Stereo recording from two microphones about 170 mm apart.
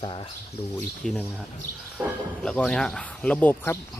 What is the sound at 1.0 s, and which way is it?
Speech, 5° left (ahead or behind).